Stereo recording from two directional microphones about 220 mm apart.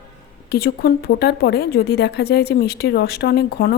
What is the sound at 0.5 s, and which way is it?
Speech, 45° left (ahead or behind).